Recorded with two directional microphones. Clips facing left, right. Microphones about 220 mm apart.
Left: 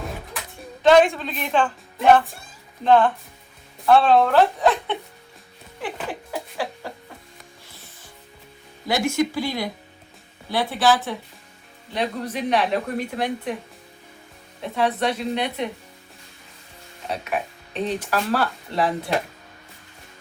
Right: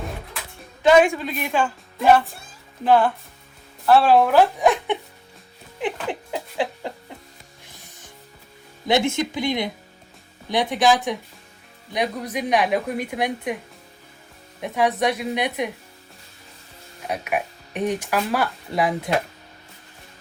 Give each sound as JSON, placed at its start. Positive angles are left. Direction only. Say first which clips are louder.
{"t": 0.8, "sound": "speech", "louder": "even", "side_deg": -10}
{"t": 5.8, "sound": "a sound", "louder": "right 4 dB", "side_deg": -20}
{"t": 8.9, "sound": "speech", "louder": "right 1 dB", "side_deg": -25}
{"t": 14.6, "sound": "speech", "louder": "right 2 dB", "side_deg": -15}
{"t": 17.1, "sound": "speech", "louder": "right 1 dB", "side_deg": -10}